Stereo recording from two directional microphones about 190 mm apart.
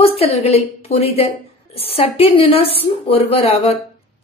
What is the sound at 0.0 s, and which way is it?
A woman's voice, 30° left (ahead or behind).